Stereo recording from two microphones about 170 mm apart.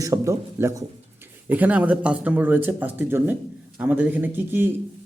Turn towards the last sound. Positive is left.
turn(degrees=-10)  # may be behind; listen again after turning